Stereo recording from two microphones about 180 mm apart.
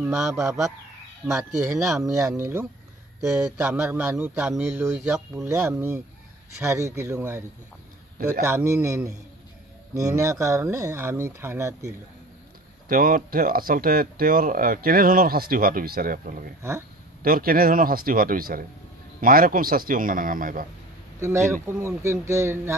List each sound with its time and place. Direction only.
0.0 s speech: 10° right (ahead or behind)
1.9 s speech: 15° right (ahead or behind)
12.8 s speech: 50° right (ahead or behind)
21.2 s speech: 15° right (ahead or behind)